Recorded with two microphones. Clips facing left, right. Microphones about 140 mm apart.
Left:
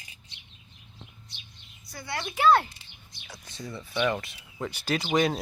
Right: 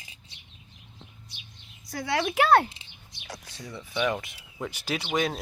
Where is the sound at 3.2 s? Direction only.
90° right.